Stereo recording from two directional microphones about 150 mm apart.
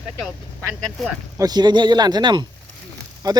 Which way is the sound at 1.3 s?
25° right (ahead or behind).